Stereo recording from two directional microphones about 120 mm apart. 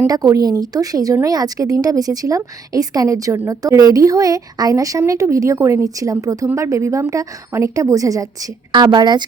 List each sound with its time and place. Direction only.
0.1 s a woman's voice: 30° right (ahead or behind)